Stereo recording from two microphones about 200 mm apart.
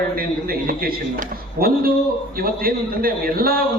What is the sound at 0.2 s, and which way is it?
A man's voice, 45° right (ahead or behind).